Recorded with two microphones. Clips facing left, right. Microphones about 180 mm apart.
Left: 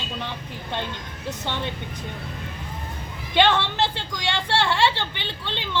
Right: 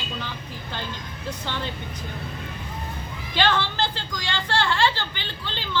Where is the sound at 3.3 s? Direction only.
20° left (ahead or behind).